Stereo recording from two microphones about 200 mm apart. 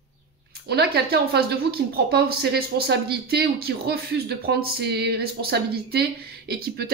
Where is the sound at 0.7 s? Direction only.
55° right (ahead or behind).